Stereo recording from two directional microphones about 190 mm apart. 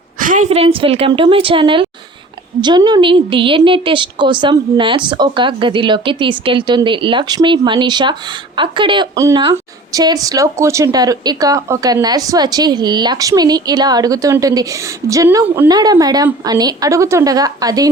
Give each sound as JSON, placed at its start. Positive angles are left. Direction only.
{"t": 0.2, "sound": "a woman's voice", "side_deg": -45}